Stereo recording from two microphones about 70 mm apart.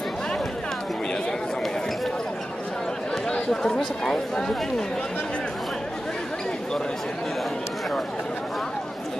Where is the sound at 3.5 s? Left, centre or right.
Centre.